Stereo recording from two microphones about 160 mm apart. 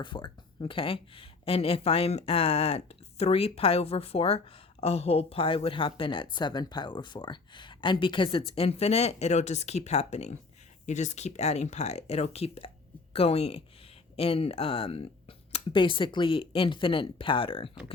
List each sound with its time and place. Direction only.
0.0 s speech: 30° left (ahead or behind)